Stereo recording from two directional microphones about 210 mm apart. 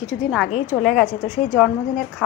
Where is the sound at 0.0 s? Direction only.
Centre (ahead or behind).